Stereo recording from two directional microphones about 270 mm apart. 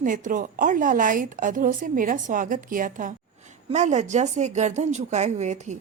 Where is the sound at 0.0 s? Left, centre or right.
Right.